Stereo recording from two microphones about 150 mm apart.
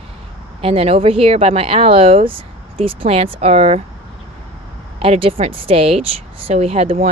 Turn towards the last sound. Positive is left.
turn(degrees=-45)  # may be behind; listen again after turning